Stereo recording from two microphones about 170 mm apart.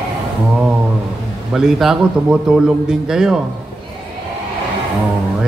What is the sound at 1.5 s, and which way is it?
Speech, 5° right (ahead or behind).